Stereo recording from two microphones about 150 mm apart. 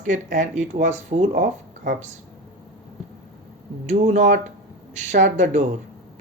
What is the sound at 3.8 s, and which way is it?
A woman's voice, 55° right (ahead or behind).